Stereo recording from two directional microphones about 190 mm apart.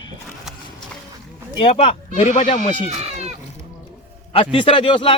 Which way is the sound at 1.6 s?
30° left (ahead or behind).